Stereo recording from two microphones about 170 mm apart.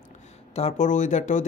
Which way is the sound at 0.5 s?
45° left (ahead or behind).